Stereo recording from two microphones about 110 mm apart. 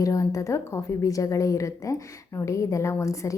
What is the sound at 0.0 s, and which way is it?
A woman's voice, 30° left (ahead or behind).